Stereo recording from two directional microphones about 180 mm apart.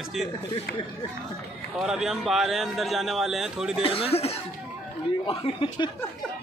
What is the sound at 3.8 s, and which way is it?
Speech, 30° left (ahead or behind).